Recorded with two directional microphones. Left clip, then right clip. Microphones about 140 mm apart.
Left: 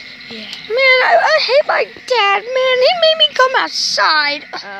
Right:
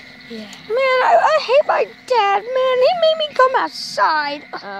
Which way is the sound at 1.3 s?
5° right (ahead or behind).